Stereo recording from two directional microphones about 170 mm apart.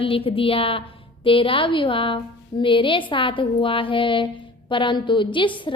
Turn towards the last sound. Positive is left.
turn(degrees=30)  # may be behind; listen again after turning